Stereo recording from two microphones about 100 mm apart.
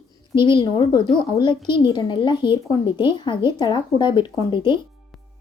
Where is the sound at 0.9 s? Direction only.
40° left (ahead or behind).